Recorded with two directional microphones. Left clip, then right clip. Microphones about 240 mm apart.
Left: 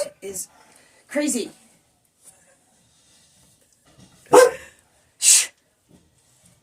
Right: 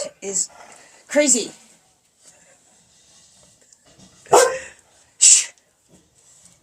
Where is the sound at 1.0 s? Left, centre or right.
Centre.